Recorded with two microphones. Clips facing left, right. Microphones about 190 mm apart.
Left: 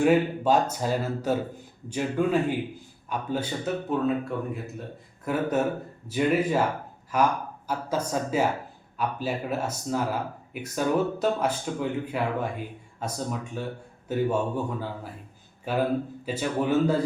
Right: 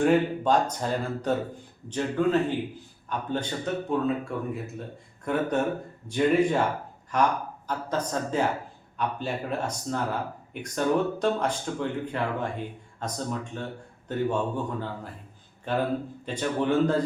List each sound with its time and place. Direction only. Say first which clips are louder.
0.0 s a man's voice: left 1 dB; 5° left (ahead or behind)